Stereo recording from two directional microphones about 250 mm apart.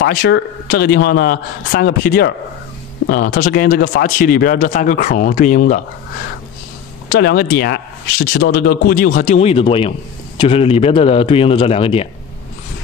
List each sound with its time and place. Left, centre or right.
0.0 s speech: left
7.1 s speech: left